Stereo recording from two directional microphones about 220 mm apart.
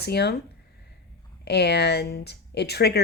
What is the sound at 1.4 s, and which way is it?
Speech, 50° left (ahead or behind).